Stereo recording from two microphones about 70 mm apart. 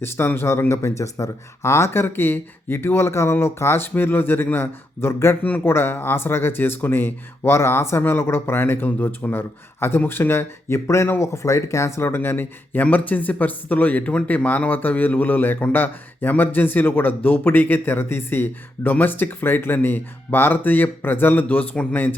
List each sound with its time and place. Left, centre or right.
0.0 s speech: left